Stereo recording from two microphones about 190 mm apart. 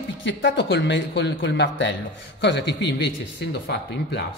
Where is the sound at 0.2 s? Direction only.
75° left (ahead or behind).